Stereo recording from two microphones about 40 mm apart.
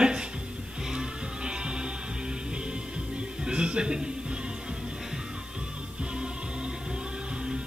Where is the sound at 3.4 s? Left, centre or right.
Right.